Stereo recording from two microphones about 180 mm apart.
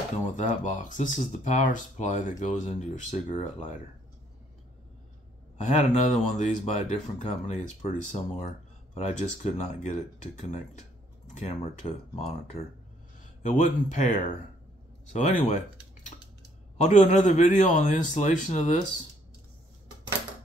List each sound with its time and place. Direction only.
0.4 s speech: 45° left (ahead or behind)
5.6 s speech: 40° left (ahead or behind)
13.4 s speech: 45° left (ahead or behind)
16.8 s speech: 40° left (ahead or behind)